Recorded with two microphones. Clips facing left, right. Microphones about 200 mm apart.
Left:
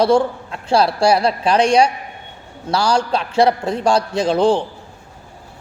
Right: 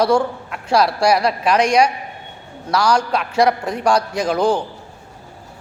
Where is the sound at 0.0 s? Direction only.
25° left (ahead or behind).